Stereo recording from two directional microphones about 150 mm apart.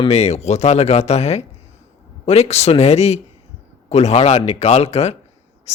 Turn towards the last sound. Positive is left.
turn(degrees=45)  # may be behind; listen again after turning